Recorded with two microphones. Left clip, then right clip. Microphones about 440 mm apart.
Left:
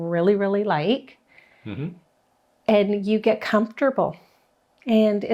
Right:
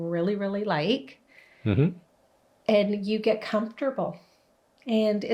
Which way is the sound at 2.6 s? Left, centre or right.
Left.